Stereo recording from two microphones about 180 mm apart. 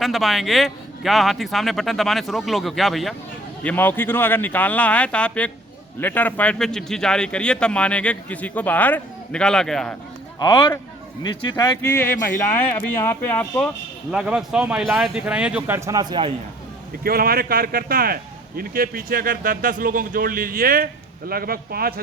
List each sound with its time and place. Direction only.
0.0 s a man's voice: centre (ahead or behind)
10.4 s speech: 25° left (ahead or behind)
11.8 s a man's voice: 10° left (ahead or behind)
14.1 s a man's voice: 5° right (ahead or behind); by 16.3 s 25° right (ahead or behind)
17.0 s speech: 55° right (ahead or behind)